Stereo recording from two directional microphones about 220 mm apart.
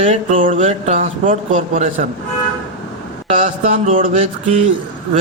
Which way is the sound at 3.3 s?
35° right (ahead or behind).